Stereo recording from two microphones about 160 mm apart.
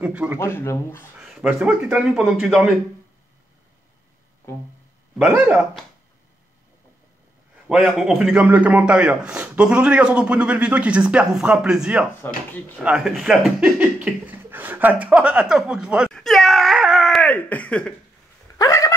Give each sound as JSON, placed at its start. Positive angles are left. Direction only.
{"t": 0.0, "sound": "speech", "side_deg": -5}
{"t": 0.4, "sound": "speech", "side_deg": 15}
{"t": 1.1, "sound": "speech", "side_deg": -5}
{"t": 5.2, "sound": "a man's voice", "side_deg": -10}
{"t": 7.6, "sound": "a man's voice", "side_deg": -5}
{"t": 18.6, "sound": "dog", "side_deg": 20}